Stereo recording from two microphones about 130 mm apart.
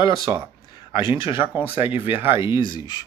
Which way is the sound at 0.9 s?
40° left (ahead or behind).